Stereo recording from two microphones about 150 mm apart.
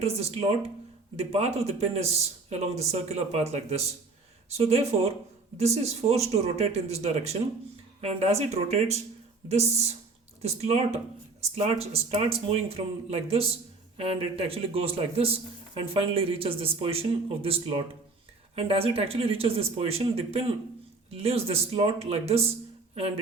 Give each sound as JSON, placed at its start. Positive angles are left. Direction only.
{"t": 0.0, "sound": "speech", "side_deg": -45}